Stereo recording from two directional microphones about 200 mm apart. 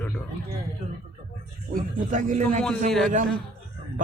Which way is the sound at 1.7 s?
40° right (ahead or behind).